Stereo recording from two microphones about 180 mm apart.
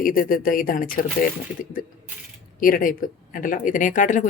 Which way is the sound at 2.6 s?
50° left (ahead or behind).